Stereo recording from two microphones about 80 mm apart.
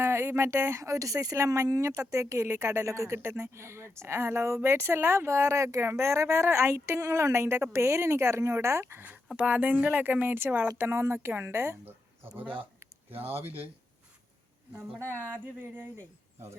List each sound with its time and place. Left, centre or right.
0.0 s a woman's voice: right
2.2 s a woman's voice: right
9.0 s a woman's voice: centre
15.0 s speech: left
15.5 s speech: right